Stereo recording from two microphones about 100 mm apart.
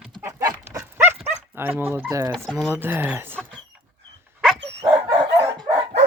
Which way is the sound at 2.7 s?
20° right (ahead or behind).